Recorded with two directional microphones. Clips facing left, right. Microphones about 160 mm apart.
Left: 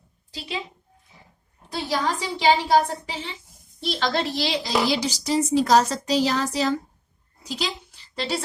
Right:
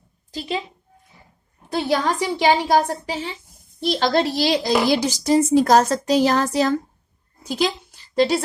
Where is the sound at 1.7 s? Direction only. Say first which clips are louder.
Right 5 dB; 55° right (ahead or behind).